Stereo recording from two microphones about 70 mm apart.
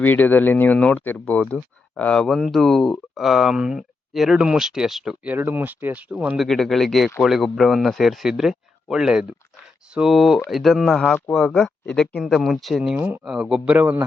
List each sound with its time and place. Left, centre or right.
0.0 s speech: left
2.2 s speech: centre
5.4 s speech: right
6.3 s speech: centre
12.2 s speech: centre
13.0 s speech: right
13.2 s speech: centre